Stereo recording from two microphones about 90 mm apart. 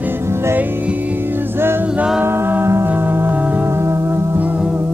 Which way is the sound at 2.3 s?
25° right (ahead or behind).